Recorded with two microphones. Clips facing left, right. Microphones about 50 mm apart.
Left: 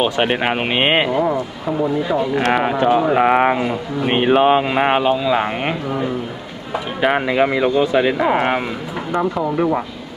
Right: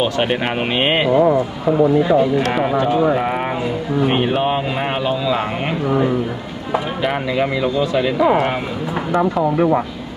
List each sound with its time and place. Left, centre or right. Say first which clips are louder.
0.0 s speech: left 1 dB; centre
1.1 s speech: right 4 dB; centre
2.3 s speech: even; left
7.1 s speech: left 4 dB; left
9.1 s speech: right 2 dB; centre